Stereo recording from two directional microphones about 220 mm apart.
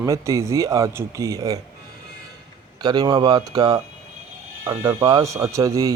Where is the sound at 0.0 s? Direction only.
15° right (ahead or behind).